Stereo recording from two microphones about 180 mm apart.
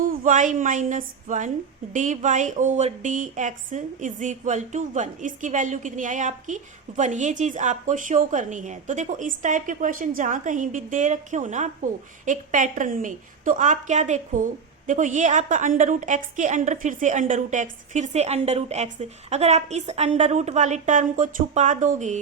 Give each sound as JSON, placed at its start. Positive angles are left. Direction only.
{"t": 0.0, "sound": "a woman's voice", "side_deg": -45}